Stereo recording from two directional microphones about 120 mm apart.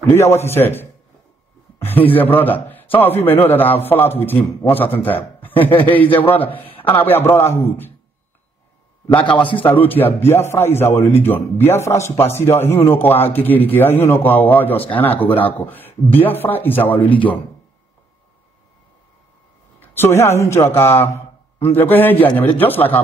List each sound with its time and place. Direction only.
0.1 s a man's voice: 20° left (ahead or behind)
9.6 s a man's voice: 15° left (ahead or behind)
19.8 s a man's voice: 15° left (ahead or behind)